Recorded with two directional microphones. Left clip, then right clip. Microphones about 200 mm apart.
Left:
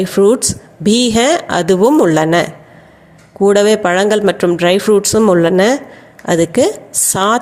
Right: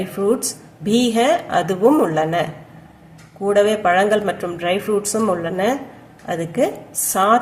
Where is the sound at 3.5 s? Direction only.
45° left (ahead or behind).